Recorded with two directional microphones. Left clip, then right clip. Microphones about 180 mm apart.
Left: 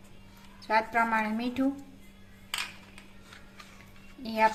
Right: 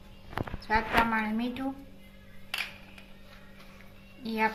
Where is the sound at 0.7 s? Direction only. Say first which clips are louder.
Even; 50° left (ahead or behind).